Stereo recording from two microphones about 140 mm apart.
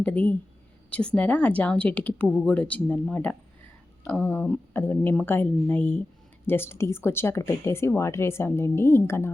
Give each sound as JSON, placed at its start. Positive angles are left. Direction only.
{"t": 0.0, "sound": "speech", "side_deg": 10}
{"t": 2.2, "sound": "speech", "side_deg": 0}
{"t": 2.5, "sound": "speech", "side_deg": 10}